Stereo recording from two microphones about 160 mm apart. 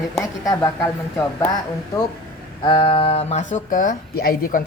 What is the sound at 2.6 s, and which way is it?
Speech, 30° left (ahead or behind).